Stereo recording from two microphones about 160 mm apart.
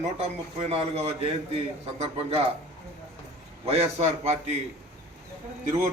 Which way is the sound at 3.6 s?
40° right (ahead or behind).